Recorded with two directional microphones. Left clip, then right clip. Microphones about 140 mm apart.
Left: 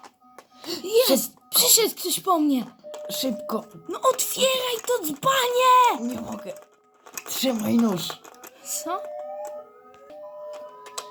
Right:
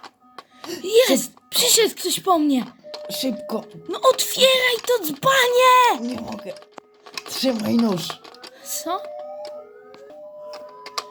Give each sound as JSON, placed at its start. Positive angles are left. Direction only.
{"t": 0.8, "sound": "speech", "side_deg": -60}
{"t": 3.0, "sound": "speech", "side_deg": 0}
{"t": 3.8, "sound": "speech", "side_deg": -65}
{"t": 6.0, "sound": "speech", "side_deg": 0}
{"t": 7.3, "sound": "speech", "side_deg": 5}